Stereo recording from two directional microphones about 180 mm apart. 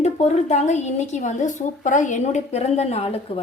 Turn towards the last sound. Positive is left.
turn(degrees=35)  # may be behind; listen again after turning